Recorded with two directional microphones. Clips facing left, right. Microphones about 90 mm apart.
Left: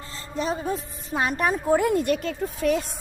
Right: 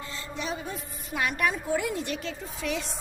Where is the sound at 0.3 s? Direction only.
40° left (ahead or behind).